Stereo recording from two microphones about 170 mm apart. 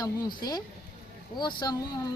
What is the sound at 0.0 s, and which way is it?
A woman's voice, 25° left (ahead or behind).